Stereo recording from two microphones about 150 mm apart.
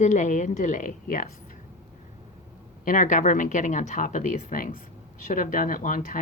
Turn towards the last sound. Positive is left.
turn(degrees=60)  # may be behind; listen again after turning